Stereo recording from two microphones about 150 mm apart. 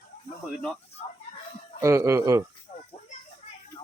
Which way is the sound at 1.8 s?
20° right (ahead or behind).